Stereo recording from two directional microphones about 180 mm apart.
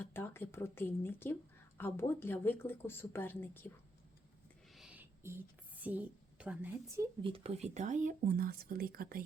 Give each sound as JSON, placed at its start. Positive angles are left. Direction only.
{"t": 0.0, "sound": "speech", "side_deg": 10}
{"t": 4.7, "sound": "a sound", "side_deg": -5}
{"t": 7.2, "sound": "speech", "side_deg": -30}